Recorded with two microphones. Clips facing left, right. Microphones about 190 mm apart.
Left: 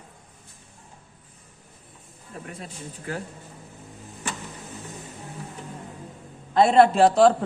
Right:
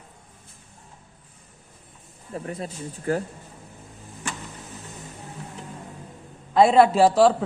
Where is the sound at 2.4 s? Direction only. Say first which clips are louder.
Right 5 dB; 40° right (ahead or behind).